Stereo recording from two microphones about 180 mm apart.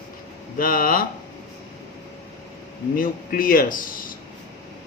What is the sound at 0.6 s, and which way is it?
Speech, 50° left (ahead or behind).